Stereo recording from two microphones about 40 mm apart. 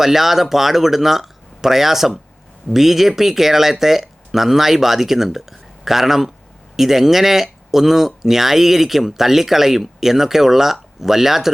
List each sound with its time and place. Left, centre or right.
0.0 s speech: centre